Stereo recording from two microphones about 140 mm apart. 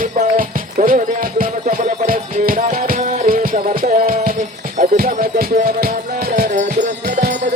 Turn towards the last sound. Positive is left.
turn(degrees=-60)  # may be behind; listen again after turning